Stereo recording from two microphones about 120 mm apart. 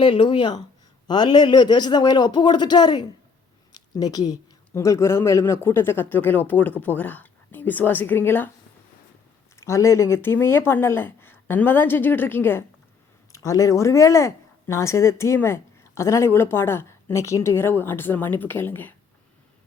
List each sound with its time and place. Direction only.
0.0 s a man's voice: 45° left (ahead or behind); by 8.4 s 15° left (ahead or behind)
9.6 s a man's voice: 25° left (ahead or behind)